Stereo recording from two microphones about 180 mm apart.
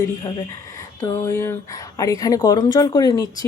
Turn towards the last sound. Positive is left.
turn(degrees=20)  # may be behind; listen again after turning